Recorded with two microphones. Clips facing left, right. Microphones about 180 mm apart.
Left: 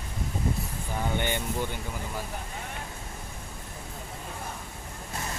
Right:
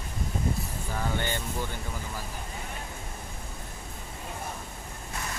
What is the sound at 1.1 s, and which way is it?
Speech, 20° left (ahead or behind).